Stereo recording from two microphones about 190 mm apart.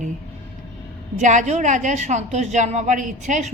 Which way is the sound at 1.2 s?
40° right (ahead or behind).